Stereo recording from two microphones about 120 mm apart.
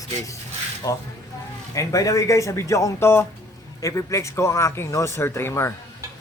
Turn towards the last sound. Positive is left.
turn(degrees=20)  # may be behind; listen again after turning